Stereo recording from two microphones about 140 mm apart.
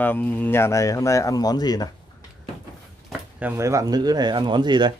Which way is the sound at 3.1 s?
10° right (ahead or behind).